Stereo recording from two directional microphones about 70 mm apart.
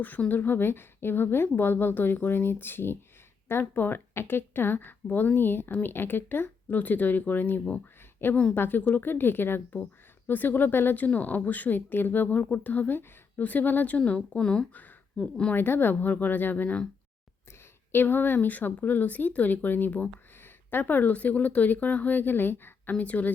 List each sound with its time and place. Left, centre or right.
0.0 s a woman's voice: left
14.7 s speech: left
15.2 s speech: centre
15.5 s speech: left
17.9 s speech: left